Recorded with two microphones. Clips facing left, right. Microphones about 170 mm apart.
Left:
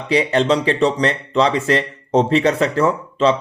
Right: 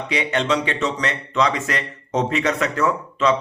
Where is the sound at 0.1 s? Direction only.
35° left (ahead or behind).